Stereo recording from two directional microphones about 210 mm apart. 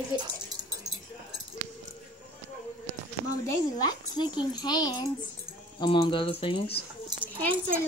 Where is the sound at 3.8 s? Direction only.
20° left (ahead or behind).